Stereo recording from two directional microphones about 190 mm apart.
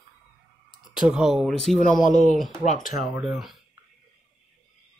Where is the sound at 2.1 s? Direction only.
40° left (ahead or behind).